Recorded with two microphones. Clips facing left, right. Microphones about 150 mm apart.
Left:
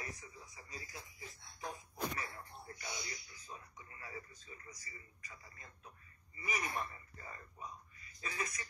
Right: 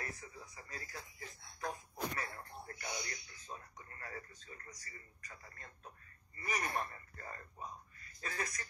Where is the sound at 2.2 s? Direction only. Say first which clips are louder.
Right 2 dB; 55° right (ahead or behind).